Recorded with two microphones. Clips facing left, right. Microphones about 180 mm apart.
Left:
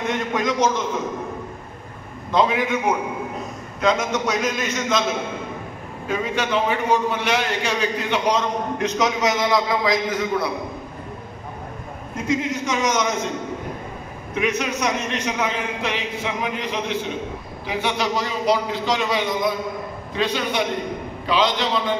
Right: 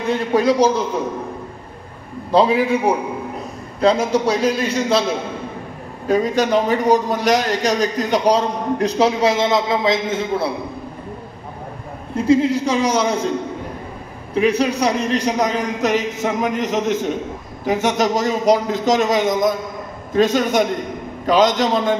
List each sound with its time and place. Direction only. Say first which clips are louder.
0.0 s a man's voice: right 6 dB; 35° right (ahead or behind)
2.3 s a man's voice: right 5 dB; 35° right (ahead or behind)
12.2 s a man's voice: right 8 dB; 30° right (ahead or behind)
14.3 s a man's voice: right 6 dB; 35° right (ahead or behind)